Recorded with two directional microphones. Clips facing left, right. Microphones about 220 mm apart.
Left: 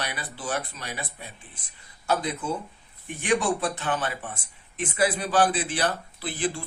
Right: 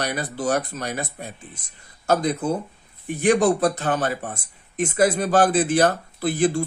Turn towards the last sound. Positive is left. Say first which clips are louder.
# right 9 dB
turn(degrees=-45)  # may be behind; listen again after turning